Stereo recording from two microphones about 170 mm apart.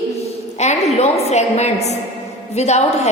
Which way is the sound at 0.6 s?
40° left (ahead or behind).